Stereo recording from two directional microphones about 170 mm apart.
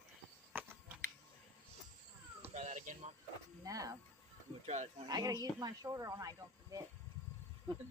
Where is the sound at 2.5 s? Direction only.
45° right (ahead or behind).